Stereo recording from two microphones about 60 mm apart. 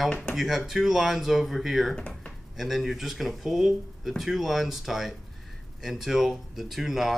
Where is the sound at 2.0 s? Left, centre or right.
Centre.